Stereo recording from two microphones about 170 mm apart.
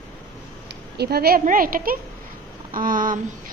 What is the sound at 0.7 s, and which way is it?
A woman's voice, 70° right (ahead or behind).